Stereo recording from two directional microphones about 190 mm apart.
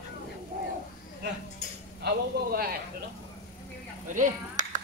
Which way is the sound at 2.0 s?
55° right (ahead or behind).